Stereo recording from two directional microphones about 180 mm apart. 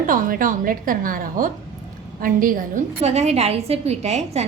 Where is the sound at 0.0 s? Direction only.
50° right (ahead or behind).